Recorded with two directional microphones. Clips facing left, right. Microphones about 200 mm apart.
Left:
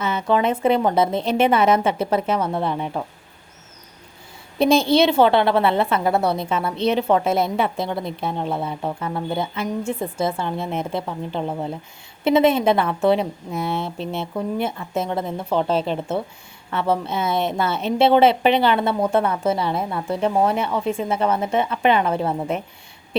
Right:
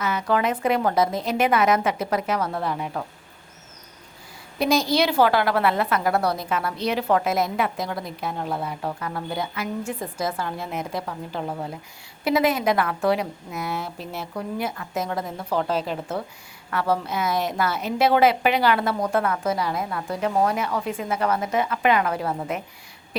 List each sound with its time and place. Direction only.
0.0 s a woman's voice: 25° left (ahead or behind)
4.5 s a woman's voice: 25° left (ahead or behind)